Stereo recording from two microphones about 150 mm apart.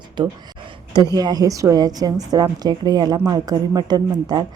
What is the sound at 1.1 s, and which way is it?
A woman's voice, 25° right (ahead or behind).